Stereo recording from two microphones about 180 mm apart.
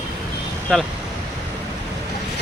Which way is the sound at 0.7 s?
Centre (ahead or behind).